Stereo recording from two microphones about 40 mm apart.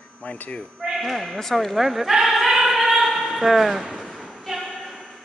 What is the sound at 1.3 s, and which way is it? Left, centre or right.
Speech, centre.